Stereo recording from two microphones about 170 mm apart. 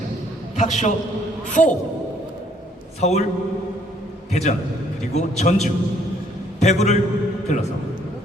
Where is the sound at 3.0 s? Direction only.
40° left (ahead or behind).